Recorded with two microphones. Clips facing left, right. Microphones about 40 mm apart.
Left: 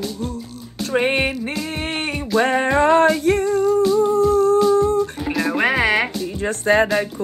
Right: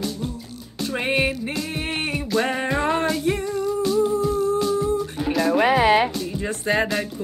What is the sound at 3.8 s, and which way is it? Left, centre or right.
Music, centre.